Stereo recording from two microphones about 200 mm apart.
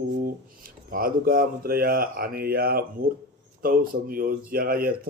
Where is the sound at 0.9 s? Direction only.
45° right (ahead or behind).